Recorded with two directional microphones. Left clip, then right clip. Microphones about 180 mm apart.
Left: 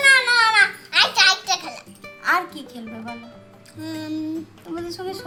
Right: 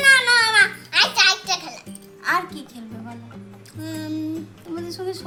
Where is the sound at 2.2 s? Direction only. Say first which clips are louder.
Left 1 dB; 5° left (ahead or behind).